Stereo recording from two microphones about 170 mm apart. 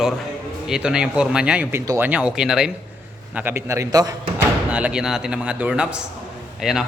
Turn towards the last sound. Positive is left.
turn(degrees=-5)  # may be behind; listen again after turning